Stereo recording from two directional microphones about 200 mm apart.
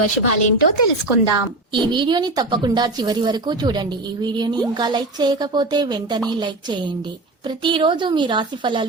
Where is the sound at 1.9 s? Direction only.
20° right (ahead or behind).